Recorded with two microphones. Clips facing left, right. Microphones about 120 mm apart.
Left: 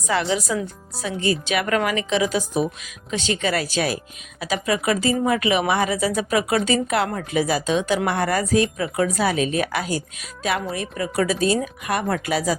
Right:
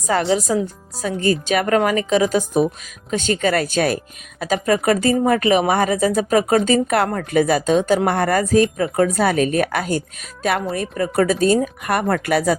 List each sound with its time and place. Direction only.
0.1 s speech: 40° right (ahead or behind)